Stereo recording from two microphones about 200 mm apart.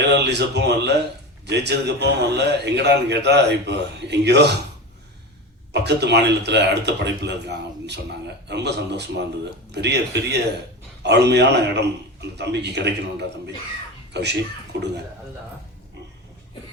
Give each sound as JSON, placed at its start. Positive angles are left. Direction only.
{"t": 0.1, "sound": "a man's voice", "side_deg": -55}
{"t": 5.7, "sound": "a man's voice", "side_deg": -55}